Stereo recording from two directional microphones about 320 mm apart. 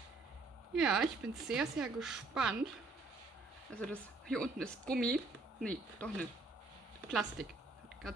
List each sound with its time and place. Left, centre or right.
0.7 s speech: centre
3.7 s speech: centre